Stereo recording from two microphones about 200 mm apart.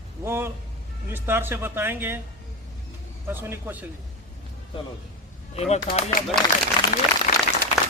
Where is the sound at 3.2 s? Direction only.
10° right (ahead or behind).